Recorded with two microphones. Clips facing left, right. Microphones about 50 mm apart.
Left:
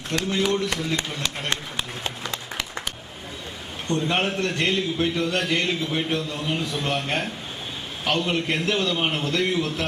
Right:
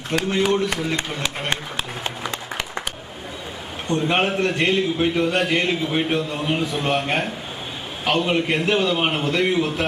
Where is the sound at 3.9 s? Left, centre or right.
Right.